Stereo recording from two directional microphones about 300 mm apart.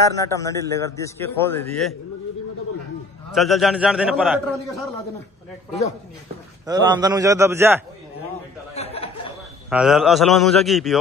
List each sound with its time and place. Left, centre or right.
0.3 s a man's voice: centre
3.3 s a man's voice: centre
6.6 s a man's voice: centre
8.7 s a sound: centre
9.7 s a man's voice: centre